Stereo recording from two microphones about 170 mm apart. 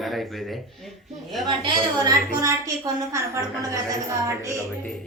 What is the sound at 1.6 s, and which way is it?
A woman's voice, 25° right (ahead or behind).